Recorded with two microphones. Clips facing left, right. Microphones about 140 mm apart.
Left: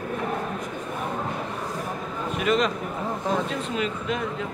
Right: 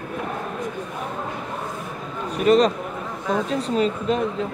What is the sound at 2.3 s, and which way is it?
Speech, 35° right (ahead or behind).